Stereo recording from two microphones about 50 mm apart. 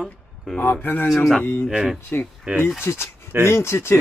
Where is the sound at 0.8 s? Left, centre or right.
Left.